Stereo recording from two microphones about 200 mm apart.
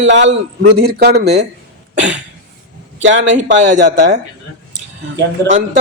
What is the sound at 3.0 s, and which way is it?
A man's voice, 65° right (ahead or behind).